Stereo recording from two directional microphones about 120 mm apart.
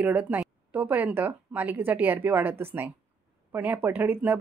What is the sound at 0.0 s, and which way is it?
Speech, 15° right (ahead or behind).